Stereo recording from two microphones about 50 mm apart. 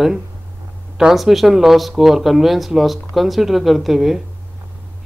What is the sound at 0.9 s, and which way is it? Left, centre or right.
Speech, centre.